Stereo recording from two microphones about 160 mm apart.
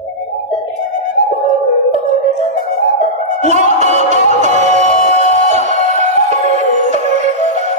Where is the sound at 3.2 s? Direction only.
45° right (ahead or behind).